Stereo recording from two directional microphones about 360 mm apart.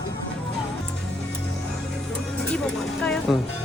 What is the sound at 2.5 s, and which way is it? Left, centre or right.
Vehicle, centre.